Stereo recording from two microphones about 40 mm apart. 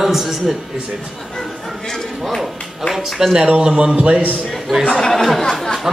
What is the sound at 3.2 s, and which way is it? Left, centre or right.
Speech, centre.